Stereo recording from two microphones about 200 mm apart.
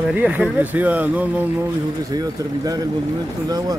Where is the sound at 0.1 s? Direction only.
5° right (ahead or behind).